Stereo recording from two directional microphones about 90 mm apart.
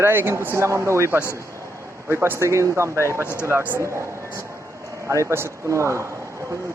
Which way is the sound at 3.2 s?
25° left (ahead or behind).